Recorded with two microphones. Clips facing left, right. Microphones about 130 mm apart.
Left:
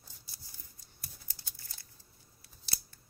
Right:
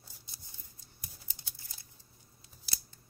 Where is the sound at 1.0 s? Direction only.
20° right (ahead or behind).